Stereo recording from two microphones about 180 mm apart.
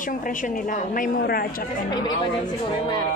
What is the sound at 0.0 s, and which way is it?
A woman's voice, 50° left (ahead or behind).